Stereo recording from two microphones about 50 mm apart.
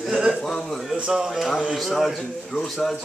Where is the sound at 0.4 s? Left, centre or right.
Centre.